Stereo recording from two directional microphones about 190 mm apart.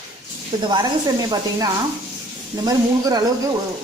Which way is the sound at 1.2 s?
20° right (ahead or behind).